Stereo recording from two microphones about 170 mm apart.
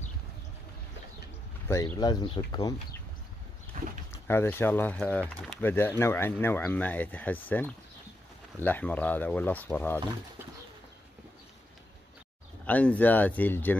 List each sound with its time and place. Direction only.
2.0 s speech: 25° left (ahead or behind)
4.1 s speech: 15° left (ahead or behind)
12.6 s speech: 10° left (ahead or behind)